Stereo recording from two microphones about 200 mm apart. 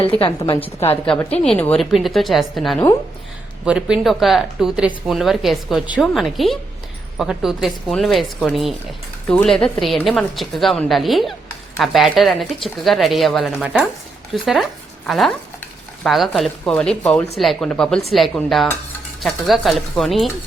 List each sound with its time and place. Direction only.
0.0 s a woman's voice: 25° left (ahead or behind)
1.0 s speech: 5° left (ahead or behind)